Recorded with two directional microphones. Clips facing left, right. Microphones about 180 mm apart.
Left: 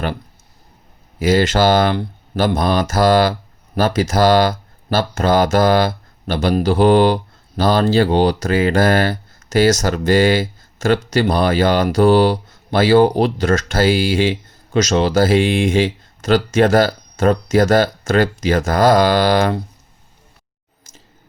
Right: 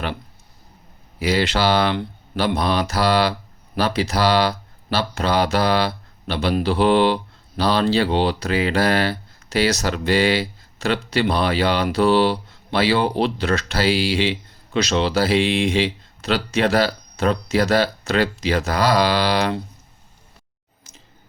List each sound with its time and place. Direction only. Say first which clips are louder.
1.2 s speech: left 5 dB; 45° left (ahead or behind)